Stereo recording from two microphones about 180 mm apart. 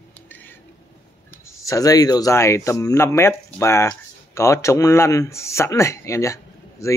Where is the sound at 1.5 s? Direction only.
15° left (ahead or behind).